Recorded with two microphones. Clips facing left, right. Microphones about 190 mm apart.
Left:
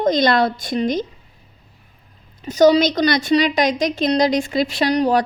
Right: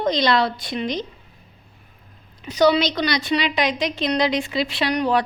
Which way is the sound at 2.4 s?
45° left (ahead or behind).